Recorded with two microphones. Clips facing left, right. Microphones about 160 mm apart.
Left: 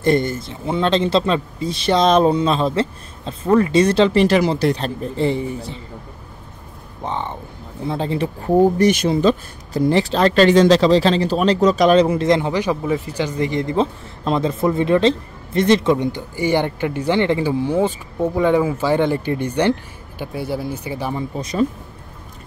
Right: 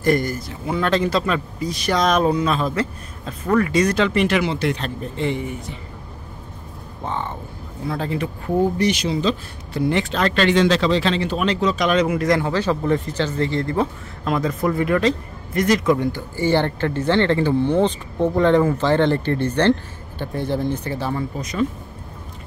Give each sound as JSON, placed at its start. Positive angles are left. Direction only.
{"t": 0.0, "sound": "speech", "side_deg": 25}
{"t": 7.0, "sound": "speech", "side_deg": 20}
{"t": 8.7, "sound": "speech", "side_deg": 50}
{"t": 9.8, "sound": "speech", "side_deg": 35}
{"t": 21.4, "sound": "speech", "side_deg": 30}